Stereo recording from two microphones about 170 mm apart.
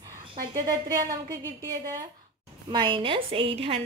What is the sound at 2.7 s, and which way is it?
A woman's voice, 25° right (ahead or behind).